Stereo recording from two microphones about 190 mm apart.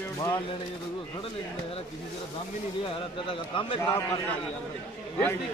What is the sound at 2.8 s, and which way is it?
A man's voice, 25° left (ahead or behind).